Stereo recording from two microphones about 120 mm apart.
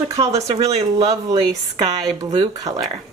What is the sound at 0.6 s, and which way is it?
Speech, 60° right (ahead or behind).